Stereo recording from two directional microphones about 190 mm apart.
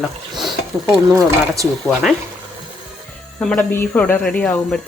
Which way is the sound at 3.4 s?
5° left (ahead or behind).